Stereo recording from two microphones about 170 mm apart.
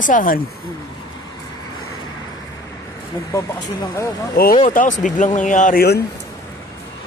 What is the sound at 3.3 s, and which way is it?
Speech, 15° left (ahead or behind).